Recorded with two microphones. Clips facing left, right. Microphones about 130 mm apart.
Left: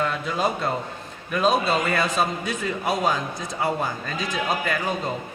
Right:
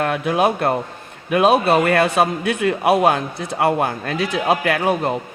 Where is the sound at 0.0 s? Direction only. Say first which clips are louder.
Right 6 dB; 65° right (ahead or behind).